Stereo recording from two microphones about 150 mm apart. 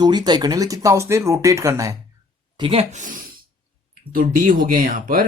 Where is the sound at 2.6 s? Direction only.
40° right (ahead or behind).